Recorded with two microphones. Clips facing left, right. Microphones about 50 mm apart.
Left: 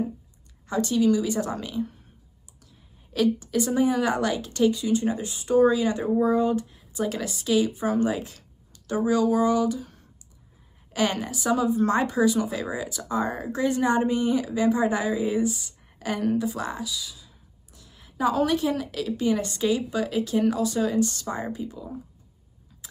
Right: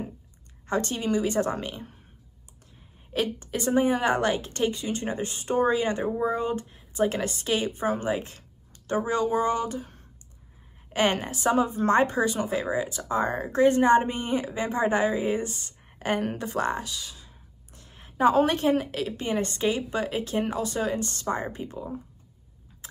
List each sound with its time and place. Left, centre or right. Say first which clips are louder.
0.7 s speech: left 5 dB; right
3.1 s speech: left 5 dB; right